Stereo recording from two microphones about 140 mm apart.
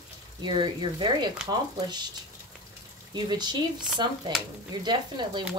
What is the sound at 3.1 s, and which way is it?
Speech, 30° right (ahead or behind).